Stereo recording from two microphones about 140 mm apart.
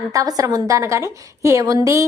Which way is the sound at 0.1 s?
25° right (ahead or behind).